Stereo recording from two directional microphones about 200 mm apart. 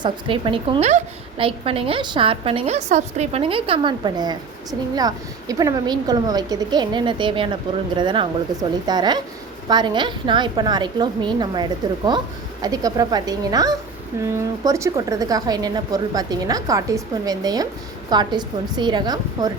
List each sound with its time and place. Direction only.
0.0 s a woman's voice: 25° right (ahead or behind)